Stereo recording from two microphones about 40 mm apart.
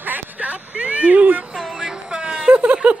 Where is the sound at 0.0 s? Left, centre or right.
Right.